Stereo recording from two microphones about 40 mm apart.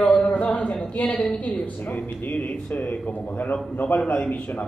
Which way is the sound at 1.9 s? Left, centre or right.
Left.